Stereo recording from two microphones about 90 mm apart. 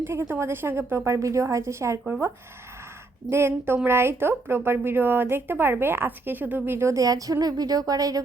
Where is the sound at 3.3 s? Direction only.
30° right (ahead or behind).